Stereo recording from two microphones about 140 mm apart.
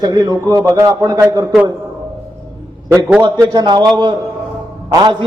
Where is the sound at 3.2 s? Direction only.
30° right (ahead or behind).